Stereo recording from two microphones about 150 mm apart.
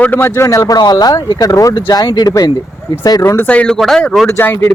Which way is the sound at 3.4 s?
10° left (ahead or behind).